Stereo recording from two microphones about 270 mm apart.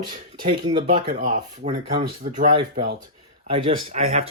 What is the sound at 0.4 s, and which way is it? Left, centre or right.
Speech, centre.